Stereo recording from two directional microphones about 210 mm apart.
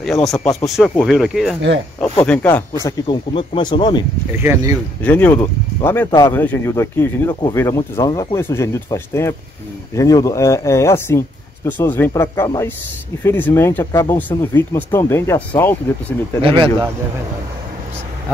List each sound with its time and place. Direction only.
0.0 s speech: centre (ahead or behind)
2.8 s speech: 20° left (ahead or behind)
4.4 s speech: 10° right (ahead or behind)
5.0 s speech: 10° left (ahead or behind)
16.4 s speech: 25° right (ahead or behind)